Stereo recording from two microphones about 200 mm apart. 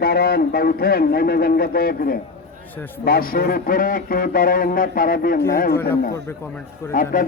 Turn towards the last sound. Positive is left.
turn(degrees=45)  # may be behind; listen again after turning